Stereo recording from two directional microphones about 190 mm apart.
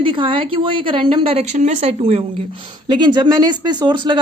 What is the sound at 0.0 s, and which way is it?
A woman's voice, 25° right (ahead or behind).